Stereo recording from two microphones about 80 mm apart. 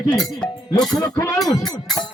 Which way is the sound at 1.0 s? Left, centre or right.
Left.